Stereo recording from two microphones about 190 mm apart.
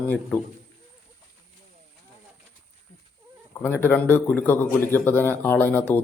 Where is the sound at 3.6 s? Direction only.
10° left (ahead or behind).